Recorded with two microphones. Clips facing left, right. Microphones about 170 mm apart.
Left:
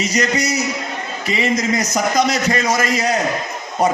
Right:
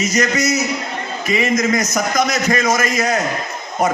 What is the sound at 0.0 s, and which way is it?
A man's voice, 35° left (ahead or behind).